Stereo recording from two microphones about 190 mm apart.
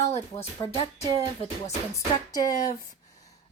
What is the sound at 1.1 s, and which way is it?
Music, 20° right (ahead or behind).